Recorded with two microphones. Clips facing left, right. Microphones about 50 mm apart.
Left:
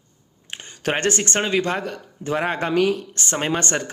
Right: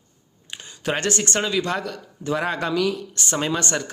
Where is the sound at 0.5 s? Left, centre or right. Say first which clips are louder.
Left 2 dB; left.